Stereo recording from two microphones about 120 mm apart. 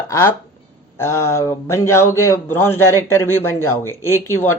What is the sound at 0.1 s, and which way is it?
Speech, 20° left (ahead or behind).